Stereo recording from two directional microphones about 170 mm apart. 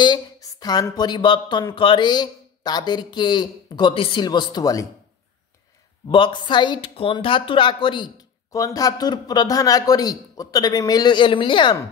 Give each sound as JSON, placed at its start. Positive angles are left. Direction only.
{"t": 0.0, "sound": "a woman's voice", "side_deg": 25}
{"t": 6.0, "sound": "a woman's voice", "side_deg": 30}